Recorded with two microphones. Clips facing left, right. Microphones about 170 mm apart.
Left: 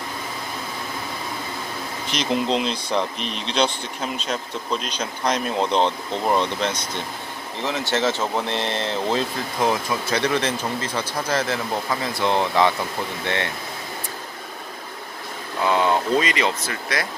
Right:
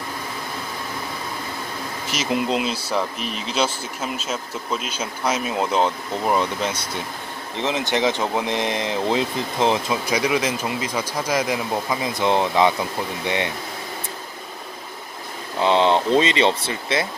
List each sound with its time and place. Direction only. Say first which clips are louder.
2.0 s speech: even; 5° right (ahead or behind)
15.6 s speech: right 3 dB; 25° right (ahead or behind)